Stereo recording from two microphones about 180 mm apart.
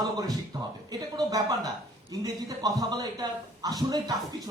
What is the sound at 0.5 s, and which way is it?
A man's voice, 20° right (ahead or behind).